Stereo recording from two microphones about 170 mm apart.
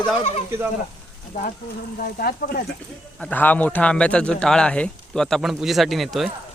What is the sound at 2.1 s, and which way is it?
Speech, 60° left (ahead or behind).